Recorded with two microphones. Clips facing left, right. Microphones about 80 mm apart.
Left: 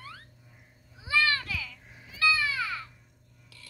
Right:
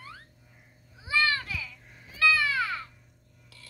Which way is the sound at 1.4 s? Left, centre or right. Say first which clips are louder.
Even; right.